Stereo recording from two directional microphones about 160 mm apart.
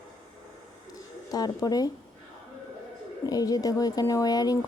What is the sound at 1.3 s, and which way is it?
Speech, 25° left (ahead or behind).